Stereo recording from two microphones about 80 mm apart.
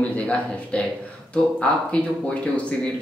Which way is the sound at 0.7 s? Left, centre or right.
Centre.